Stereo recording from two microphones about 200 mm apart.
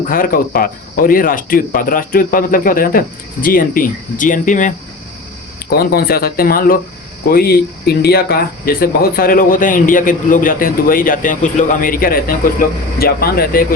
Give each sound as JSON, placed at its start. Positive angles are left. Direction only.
{"t": 0.1, "sound": "speech", "side_deg": 45}
{"t": 5.7, "sound": "speech", "side_deg": 50}